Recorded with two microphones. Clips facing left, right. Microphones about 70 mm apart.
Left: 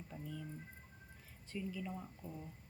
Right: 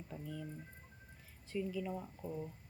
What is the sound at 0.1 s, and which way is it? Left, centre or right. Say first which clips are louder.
Speech: right 2 dB; centre.